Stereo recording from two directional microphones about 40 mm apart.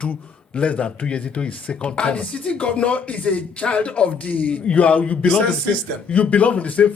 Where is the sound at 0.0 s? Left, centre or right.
Left.